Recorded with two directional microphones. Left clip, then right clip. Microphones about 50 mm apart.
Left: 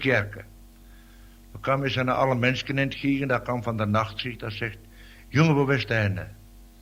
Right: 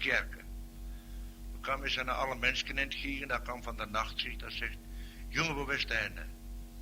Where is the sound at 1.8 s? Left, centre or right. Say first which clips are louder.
Left 9 dB; right.